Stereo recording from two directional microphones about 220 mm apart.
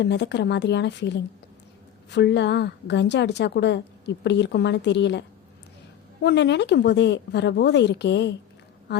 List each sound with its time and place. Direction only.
0.0 s a woman's voice: 50° left (ahead or behind)
6.2 s a woman's voice: 50° left (ahead or behind)